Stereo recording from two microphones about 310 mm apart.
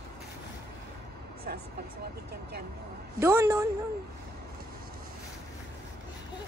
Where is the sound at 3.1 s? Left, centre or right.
Centre.